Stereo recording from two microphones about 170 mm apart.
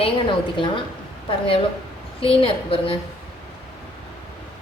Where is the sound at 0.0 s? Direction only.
30° left (ahead or behind).